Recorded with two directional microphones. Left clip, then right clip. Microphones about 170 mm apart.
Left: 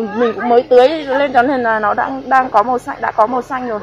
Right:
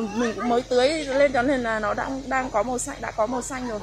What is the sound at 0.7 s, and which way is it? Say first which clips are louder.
A woman's voice: left 11 dB; 5° left (ahead or behind).